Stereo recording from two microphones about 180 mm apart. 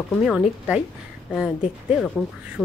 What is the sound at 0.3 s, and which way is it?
Speech, 5° right (ahead or behind).